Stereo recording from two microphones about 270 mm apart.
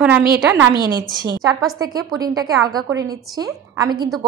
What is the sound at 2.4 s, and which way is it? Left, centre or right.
A woman's voice, centre.